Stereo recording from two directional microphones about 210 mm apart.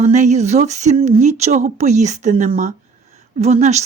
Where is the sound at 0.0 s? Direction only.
35° right (ahead or behind).